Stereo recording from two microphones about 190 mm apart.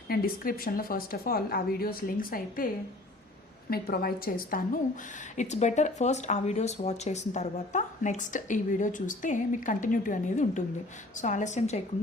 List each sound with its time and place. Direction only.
0.1 s a woman's voice: 50° left (ahead or behind)
3.7 s a woman's voice: 50° left (ahead or behind)
5.4 s speech: 40° left (ahead or behind)